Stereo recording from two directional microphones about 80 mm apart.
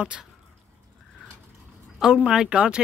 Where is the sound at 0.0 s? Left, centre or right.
Centre.